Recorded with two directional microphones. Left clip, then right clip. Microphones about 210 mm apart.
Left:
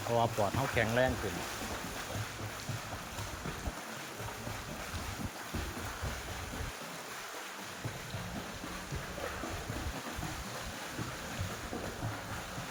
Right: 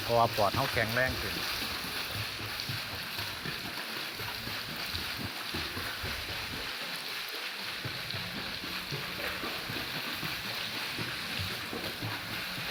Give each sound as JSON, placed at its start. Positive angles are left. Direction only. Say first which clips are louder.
{"t": 0.1, "sound": "speech", "louder": "right 5 dB", "side_deg": 5}
{"t": 0.8, "sound": "speech", "louder": "left 2 dB", "side_deg": 15}